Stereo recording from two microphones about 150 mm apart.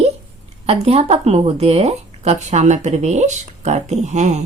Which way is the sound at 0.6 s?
40° right (ahead or behind).